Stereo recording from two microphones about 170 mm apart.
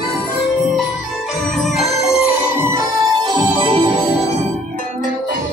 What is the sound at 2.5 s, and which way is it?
Music, 15° right (ahead or behind).